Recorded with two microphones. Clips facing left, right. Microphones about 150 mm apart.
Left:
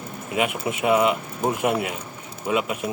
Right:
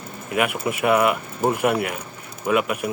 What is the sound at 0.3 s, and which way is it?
Speech, 25° left (ahead or behind).